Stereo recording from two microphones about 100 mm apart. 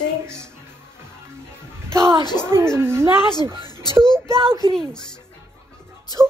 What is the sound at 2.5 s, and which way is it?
Speech, 25° right (ahead or behind).